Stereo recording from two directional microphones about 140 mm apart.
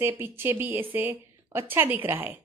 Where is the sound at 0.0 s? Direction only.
15° right (ahead or behind).